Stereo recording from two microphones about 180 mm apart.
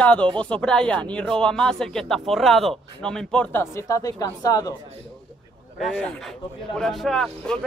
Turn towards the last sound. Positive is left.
turn(degrees=0)  # may be behind; listen again after turning